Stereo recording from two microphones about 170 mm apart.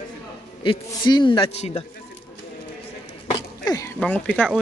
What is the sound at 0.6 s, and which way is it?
A man's voice, 25° left (ahead or behind).